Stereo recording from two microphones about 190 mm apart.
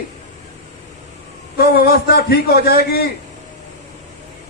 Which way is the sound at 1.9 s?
55° left (ahead or behind).